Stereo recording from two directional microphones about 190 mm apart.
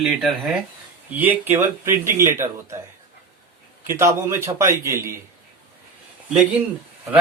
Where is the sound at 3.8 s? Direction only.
15° right (ahead or behind).